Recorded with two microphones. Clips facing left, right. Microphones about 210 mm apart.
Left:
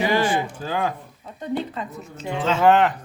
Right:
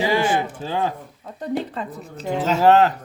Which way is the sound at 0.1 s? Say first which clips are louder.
Right 1 dB; 25° right (ahead or behind).